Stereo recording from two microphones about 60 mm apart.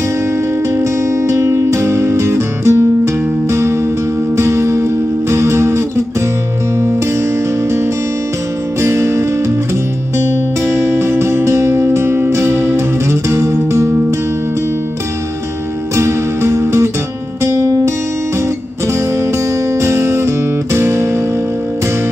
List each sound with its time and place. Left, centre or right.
0.7 s music: right
8.8 s music: right
10.7 s music: right
16.0 s music: right
19.8 s music: right